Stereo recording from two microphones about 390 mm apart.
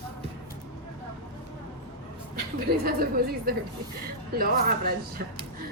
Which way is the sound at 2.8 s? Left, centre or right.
Right.